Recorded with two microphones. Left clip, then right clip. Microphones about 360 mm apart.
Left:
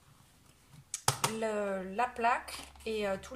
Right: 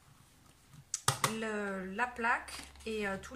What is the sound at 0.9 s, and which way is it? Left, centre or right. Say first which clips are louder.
Speech: even; centre.